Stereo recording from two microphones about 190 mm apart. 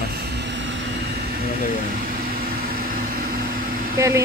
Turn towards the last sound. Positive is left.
turn(degrees=-15)  # may be behind; listen again after turning